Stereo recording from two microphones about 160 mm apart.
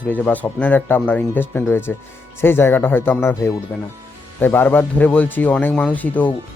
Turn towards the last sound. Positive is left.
turn(degrees=10)  # may be behind; listen again after turning